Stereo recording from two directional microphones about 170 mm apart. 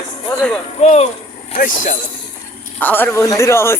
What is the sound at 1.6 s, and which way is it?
Speech, 50° left (ahead or behind).